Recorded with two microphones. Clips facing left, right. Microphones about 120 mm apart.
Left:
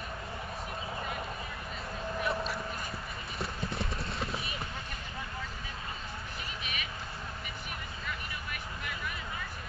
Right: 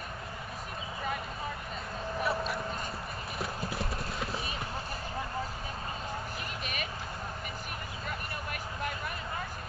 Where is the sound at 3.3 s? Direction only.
5° right (ahead or behind).